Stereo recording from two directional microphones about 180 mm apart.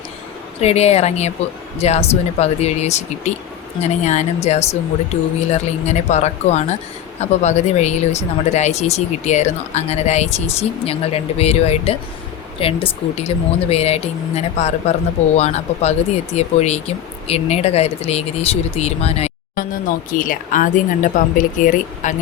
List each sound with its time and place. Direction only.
0.6 s speech: 35° left (ahead or behind)